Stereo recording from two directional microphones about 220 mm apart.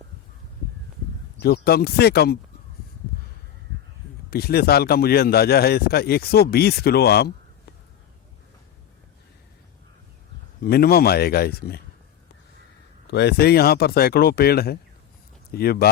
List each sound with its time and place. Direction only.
1.4 s a man's voice: 45° left (ahead or behind)
4.3 s a man's voice: 45° left (ahead or behind)
10.6 s a man's voice: 45° left (ahead or behind)
13.1 s a man's voice: 50° left (ahead or behind)